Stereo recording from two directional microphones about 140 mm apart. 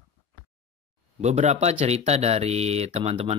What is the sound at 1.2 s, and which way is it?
Speech, 55° right (ahead or behind).